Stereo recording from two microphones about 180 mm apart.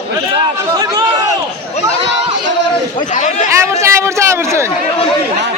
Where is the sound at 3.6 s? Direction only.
15° right (ahead or behind).